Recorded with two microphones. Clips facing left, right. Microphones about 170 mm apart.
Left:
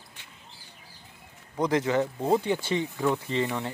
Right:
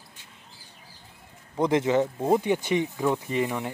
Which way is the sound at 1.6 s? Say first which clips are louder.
Right 2 dB; 20° right (ahead or behind).